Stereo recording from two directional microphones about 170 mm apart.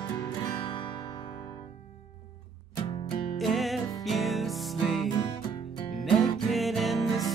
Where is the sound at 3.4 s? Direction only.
Centre (ahead or behind).